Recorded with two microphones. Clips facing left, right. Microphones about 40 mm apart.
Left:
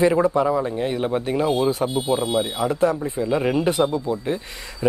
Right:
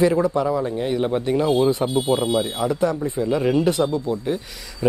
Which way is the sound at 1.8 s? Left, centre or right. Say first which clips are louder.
Right 2 dB; left.